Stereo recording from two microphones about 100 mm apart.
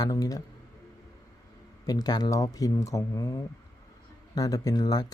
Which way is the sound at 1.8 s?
40° left (ahead or behind).